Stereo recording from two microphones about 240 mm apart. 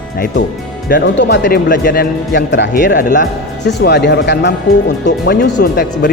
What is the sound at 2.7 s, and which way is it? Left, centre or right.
Speech, left.